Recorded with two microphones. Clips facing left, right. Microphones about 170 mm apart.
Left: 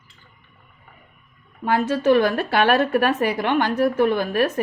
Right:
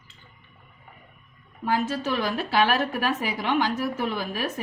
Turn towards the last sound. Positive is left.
turn(degrees=60)  # may be behind; listen again after turning